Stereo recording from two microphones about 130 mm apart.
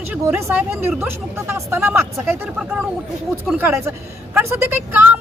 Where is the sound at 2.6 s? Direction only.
10° right (ahead or behind).